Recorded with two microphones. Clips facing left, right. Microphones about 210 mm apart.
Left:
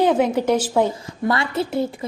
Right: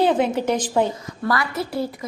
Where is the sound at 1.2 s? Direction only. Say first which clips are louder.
Left 2 dB; 25° left (ahead or behind).